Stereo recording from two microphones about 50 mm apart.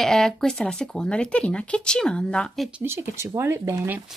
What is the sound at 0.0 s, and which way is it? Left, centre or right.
Speech, centre.